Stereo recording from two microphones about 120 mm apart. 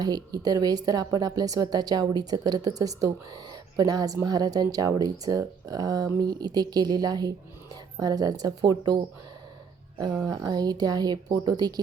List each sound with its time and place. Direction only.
0.0 s a woman's voice: 30° right (ahead or behind)
10.2 s a woman's voice: 30° right (ahead or behind)